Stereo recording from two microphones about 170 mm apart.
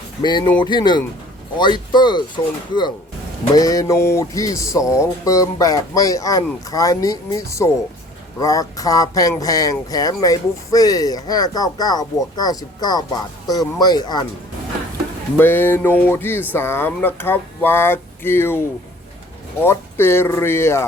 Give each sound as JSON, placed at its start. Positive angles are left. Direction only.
{"t": 0.2, "sound": "speech", "side_deg": 25}
{"t": 15.4, "sound": "speech", "side_deg": 10}
{"t": 19.6, "sound": "speech", "side_deg": 15}